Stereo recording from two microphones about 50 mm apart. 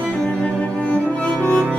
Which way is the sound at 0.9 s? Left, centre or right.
Left.